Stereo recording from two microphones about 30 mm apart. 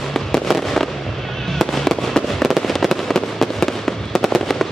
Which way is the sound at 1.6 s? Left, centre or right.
Centre.